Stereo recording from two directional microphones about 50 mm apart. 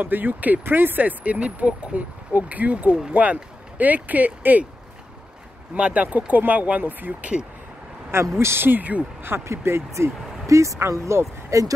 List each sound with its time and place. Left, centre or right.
0.0 s speech: right
5.8 s speech: right
8.4 s speech: right
8.6 s speech: right
9.4 s speech: right
9.9 s speech: right